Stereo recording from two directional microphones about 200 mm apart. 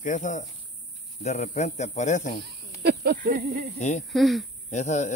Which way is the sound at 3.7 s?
35° left (ahead or behind).